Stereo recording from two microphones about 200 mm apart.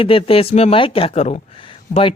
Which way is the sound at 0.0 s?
25° left (ahead or behind).